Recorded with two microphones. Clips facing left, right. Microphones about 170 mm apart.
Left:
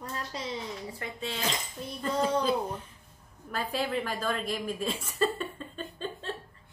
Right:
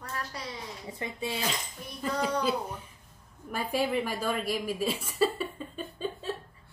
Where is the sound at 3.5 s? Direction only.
10° right (ahead or behind).